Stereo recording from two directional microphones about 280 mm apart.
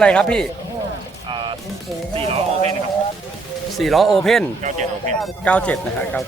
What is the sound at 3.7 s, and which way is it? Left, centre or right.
Speech, centre.